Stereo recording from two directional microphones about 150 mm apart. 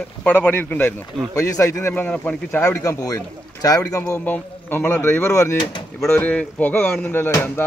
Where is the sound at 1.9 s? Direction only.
10° left (ahead or behind).